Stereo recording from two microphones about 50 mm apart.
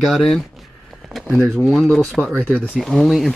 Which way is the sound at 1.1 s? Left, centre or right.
Centre.